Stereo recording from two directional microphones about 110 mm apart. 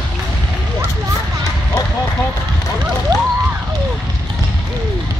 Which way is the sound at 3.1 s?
35° right (ahead or behind).